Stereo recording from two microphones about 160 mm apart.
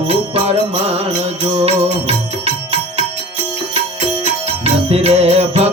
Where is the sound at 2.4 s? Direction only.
40° right (ahead or behind).